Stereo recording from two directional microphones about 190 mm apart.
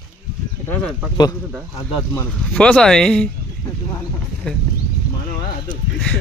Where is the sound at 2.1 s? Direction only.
10° left (ahead or behind).